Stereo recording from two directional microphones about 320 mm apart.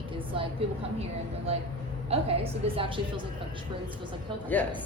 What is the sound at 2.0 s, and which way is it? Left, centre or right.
Speech, centre.